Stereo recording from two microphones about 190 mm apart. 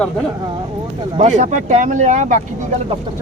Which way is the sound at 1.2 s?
40° right (ahead or behind).